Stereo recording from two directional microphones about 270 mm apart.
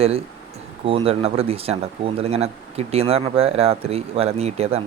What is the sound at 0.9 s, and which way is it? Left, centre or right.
Speech, right.